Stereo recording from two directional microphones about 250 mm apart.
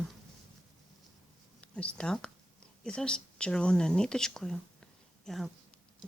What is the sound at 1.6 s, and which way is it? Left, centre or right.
Speech, centre.